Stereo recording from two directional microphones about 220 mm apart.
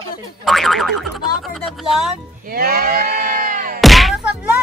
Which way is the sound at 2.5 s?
45° right (ahead or behind).